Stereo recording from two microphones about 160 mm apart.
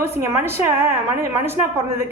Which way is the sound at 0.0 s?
15° right (ahead or behind).